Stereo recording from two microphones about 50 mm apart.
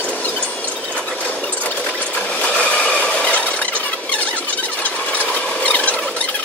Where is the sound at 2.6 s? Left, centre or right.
Left.